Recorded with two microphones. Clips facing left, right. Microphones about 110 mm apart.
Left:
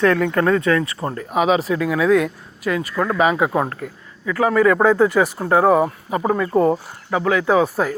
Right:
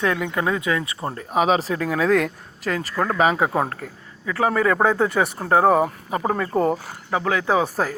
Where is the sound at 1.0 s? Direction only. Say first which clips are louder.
Even; 35° right (ahead or behind).